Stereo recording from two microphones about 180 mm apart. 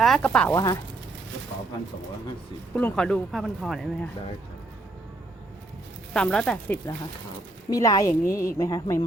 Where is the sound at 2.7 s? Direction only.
10° left (ahead or behind).